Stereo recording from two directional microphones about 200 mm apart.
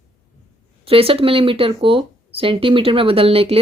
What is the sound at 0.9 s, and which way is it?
Speech, 30° right (ahead or behind).